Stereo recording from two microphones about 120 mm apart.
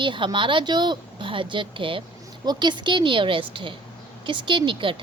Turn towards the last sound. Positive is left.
turn(degrees=-45)  # may be behind; listen again after turning